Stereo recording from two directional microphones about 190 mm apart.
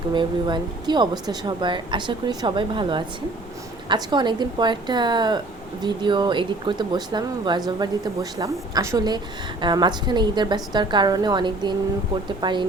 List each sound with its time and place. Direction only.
0.1 s speech: 25° right (ahead or behind)